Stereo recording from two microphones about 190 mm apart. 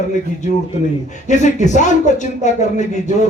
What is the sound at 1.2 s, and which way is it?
Speech, 40° left (ahead or behind).